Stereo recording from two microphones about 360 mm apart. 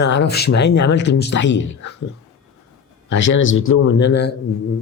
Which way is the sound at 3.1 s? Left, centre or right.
Left.